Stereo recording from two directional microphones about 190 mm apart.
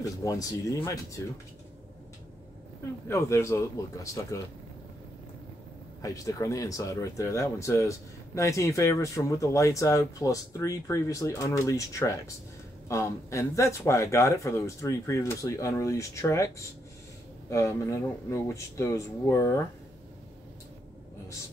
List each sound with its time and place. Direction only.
0.0 s speech: 20° left (ahead or behind)
3.1 s speech: 15° left (ahead or behind)
6.0 s speech: 15° left (ahead or behind)